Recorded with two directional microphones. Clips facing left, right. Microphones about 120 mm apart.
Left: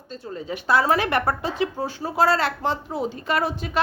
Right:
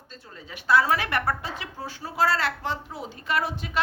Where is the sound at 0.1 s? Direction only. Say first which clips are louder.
Left 12 dB; 30° left (ahead or behind).